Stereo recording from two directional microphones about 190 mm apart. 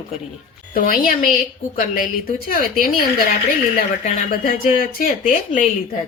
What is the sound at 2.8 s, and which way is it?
Speech, 50° left (ahead or behind).